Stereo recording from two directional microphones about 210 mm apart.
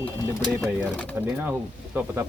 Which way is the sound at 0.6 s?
Centre (ahead or behind).